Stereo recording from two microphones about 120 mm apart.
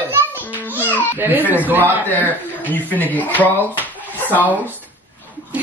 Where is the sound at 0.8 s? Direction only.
15° left (ahead or behind).